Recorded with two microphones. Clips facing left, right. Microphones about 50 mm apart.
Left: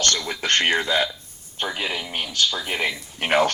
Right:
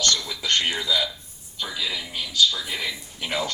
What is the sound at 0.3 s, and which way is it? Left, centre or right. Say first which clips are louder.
A man's voice: left 4 dB; left.